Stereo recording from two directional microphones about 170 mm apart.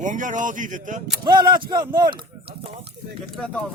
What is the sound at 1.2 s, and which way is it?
Speech, 25° right (ahead or behind).